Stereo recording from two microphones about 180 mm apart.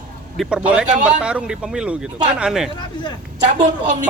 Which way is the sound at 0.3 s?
5° right (ahead or behind).